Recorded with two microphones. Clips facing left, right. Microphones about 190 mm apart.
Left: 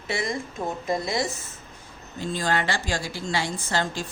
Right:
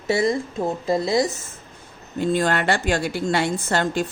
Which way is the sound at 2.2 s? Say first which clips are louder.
Right 6 dB; 60° right (ahead or behind).